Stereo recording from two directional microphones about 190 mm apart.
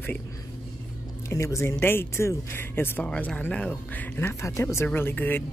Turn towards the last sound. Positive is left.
turn(degrees=10)  # may be behind; listen again after turning